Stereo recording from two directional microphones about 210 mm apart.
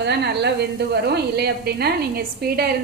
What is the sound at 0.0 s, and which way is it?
A woman's voice, 55° right (ahead or behind).